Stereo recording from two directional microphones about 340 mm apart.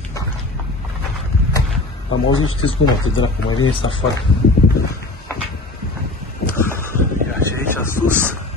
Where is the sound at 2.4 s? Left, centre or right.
Left.